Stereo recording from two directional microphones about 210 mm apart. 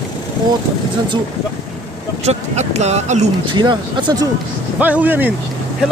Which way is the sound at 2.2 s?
30° right (ahead or behind).